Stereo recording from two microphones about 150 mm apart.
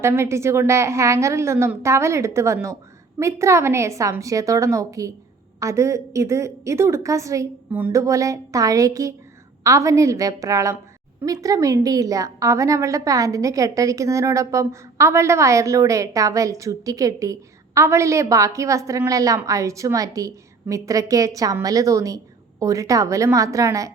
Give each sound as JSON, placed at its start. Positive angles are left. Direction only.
{"t": 0.0, "sound": "a woman's voice", "side_deg": -15}